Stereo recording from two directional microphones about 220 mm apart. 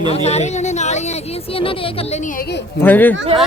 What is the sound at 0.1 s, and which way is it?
Speech, 30° left (ahead or behind).